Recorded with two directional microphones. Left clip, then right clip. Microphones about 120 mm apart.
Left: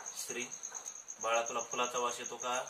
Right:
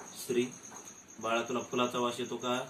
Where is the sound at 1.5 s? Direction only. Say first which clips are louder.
Right 3 dB; 15° left (ahead or behind).